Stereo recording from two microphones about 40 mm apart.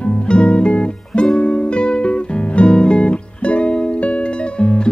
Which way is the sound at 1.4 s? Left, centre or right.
Left.